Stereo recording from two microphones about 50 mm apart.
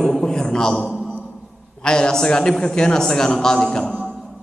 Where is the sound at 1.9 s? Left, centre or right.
Centre.